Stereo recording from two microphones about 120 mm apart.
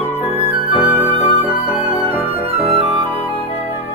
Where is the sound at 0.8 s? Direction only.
55° right (ahead or behind).